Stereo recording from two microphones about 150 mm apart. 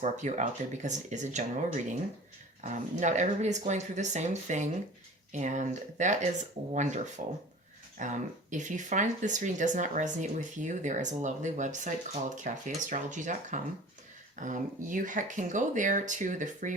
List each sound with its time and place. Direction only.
0.0 s speech: 50° right (ahead or behind)